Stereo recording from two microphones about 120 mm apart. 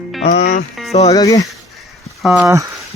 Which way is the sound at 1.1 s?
30° left (ahead or behind).